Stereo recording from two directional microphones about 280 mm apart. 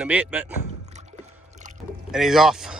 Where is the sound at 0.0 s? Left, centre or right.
Centre.